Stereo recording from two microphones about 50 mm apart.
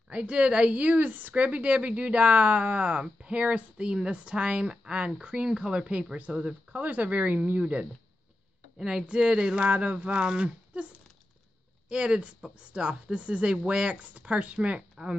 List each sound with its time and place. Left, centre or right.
0.1 s a woman's voice: right
8.7 s a woman's voice: centre
11.9 s a woman's voice: centre